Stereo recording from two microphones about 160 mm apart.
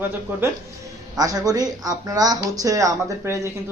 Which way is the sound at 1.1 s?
20° right (ahead or behind).